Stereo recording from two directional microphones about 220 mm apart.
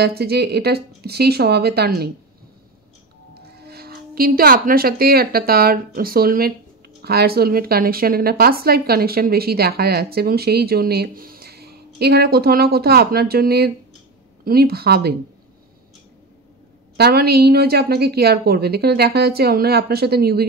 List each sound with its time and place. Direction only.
0.0 s speech: 45° right (ahead or behind)
3.3 s a woman's voice: 45° right (ahead or behind)
16.9 s speech: 45° right (ahead or behind)